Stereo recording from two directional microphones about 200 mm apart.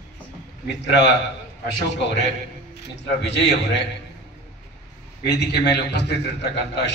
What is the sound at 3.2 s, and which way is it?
Speech, 60° left (ahead or behind).